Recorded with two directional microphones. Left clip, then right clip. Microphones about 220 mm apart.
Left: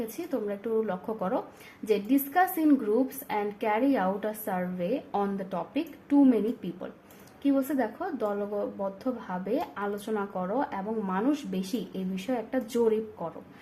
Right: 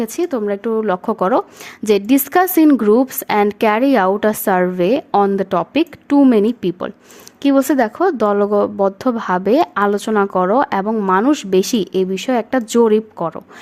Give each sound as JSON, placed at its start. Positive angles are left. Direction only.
{"t": 0.0, "sound": "speech", "side_deg": -45}